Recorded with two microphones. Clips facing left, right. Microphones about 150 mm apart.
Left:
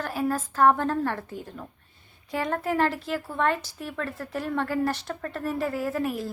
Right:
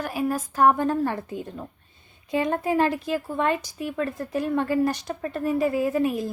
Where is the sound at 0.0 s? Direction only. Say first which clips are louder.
Right 1 dB; 15° right (ahead or behind).